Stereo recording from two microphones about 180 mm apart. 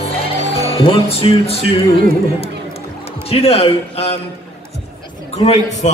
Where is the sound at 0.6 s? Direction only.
35° left (ahead or behind).